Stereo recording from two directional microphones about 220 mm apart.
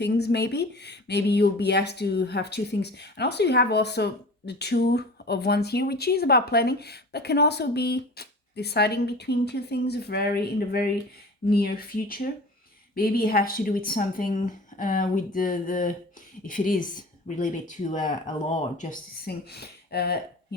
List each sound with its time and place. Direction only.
0.0 s speech: 50° left (ahead or behind)